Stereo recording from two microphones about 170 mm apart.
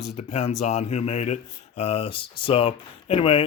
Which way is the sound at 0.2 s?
40° left (ahead or behind).